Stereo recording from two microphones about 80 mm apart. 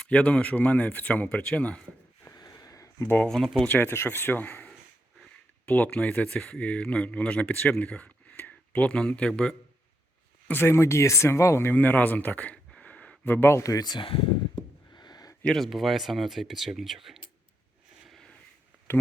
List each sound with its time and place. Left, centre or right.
0.0 s speech: centre
2.2 s a sound: left
3.2 s speech: centre
3.7 s speech: left
10.5 s speech: left
12.7 s a sound: centre
13.6 s a sound: left
15.4 s speech: centre
18.9 s speech: left